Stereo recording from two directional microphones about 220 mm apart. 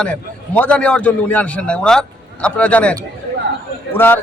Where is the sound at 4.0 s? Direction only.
10° left (ahead or behind).